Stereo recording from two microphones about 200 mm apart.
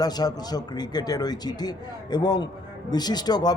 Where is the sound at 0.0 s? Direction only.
20° left (ahead or behind).